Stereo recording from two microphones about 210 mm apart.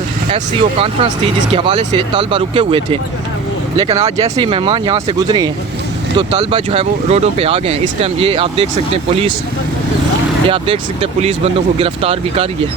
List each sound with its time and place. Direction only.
0.3 s speech: 25° right (ahead or behind)
10.5 s speech: 25° right (ahead or behind)